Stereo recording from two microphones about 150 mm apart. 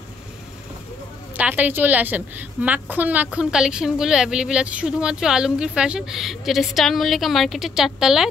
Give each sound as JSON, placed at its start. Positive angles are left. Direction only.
{"t": 1.3, "sound": "a woman's voice", "side_deg": -10}